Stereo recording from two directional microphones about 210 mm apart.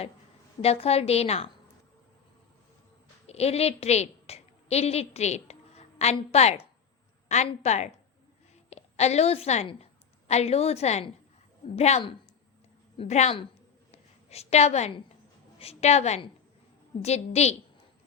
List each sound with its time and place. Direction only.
0.6 s a woman's voice: 30° left (ahead or behind)
3.2 s a woman's voice: 30° left (ahead or behind)
13.9 s a sound: 30° left (ahead or behind)
15.5 s a woman's voice: 30° left (ahead or behind)